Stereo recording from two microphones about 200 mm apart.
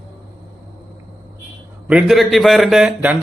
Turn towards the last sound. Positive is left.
turn(degrees=-5)  # may be behind; listen again after turning